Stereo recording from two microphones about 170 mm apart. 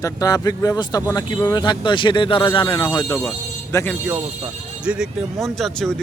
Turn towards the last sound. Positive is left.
turn(degrees=5)  # may be behind; listen again after turning